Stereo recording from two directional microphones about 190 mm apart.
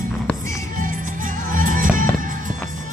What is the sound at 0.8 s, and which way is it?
Music, 45° right (ahead or behind).